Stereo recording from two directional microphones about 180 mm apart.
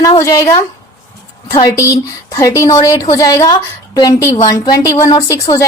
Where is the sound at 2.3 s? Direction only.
15° left (ahead or behind).